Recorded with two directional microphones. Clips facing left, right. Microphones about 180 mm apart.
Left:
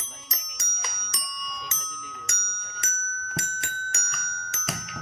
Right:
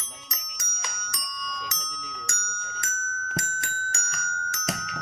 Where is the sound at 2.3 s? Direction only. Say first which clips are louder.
Right 5 dB; 20° left (ahead or behind).